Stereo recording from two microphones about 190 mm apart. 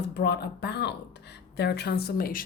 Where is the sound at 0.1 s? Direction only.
60° left (ahead or behind).